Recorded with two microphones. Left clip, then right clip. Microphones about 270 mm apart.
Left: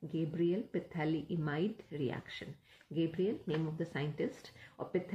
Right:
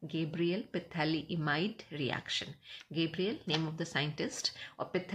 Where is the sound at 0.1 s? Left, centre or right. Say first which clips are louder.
Even; right.